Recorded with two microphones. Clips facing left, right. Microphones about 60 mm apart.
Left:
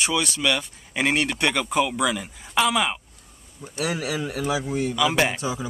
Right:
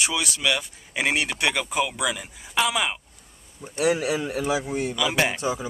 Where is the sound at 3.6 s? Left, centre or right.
Right.